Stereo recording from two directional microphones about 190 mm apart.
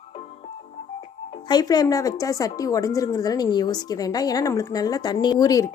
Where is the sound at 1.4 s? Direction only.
20° left (ahead or behind).